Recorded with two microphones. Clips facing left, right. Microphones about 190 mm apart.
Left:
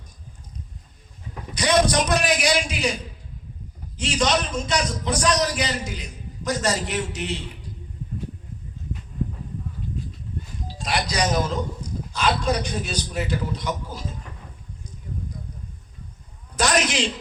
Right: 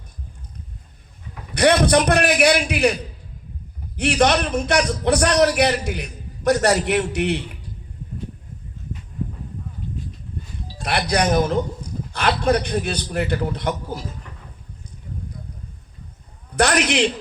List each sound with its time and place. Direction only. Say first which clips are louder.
1.5 s a man's voice: right 4 dB; 60° right (ahead or behind)
10.8 s a man's voice: right 4 dB; 60° right (ahead or behind)
16.6 s a man's voice: right 4 dB; 60° right (ahead or behind)